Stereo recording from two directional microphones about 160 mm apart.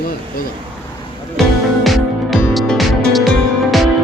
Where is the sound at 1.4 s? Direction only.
Centre (ahead or behind).